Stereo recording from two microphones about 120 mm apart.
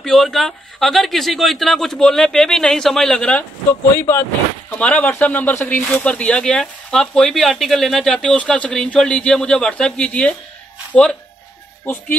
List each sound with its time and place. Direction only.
0.0 s a man's voice: centre (ahead or behind)
4.6 s speech: 10° left (ahead or behind)